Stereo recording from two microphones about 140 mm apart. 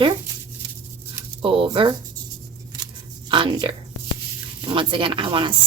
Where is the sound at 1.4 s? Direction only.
40° right (ahead or behind).